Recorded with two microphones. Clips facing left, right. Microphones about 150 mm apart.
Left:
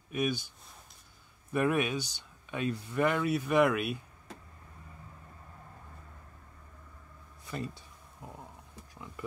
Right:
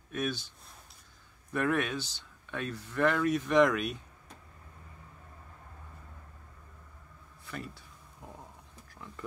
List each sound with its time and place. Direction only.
0.1 s speech: 10° left (ahead or behind)
1.5 s speech: 15° left (ahead or behind)
7.4 s speech: 20° left (ahead or behind)
8.9 s a sound: 15° left (ahead or behind)